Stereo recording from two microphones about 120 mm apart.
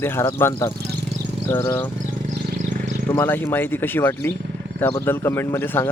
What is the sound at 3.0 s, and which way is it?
Speech, 20° left (ahead or behind).